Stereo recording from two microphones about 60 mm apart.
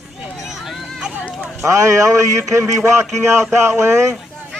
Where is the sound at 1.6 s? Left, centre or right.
Right.